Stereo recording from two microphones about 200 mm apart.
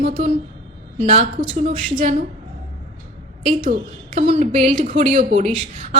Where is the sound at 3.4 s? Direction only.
40° right (ahead or behind).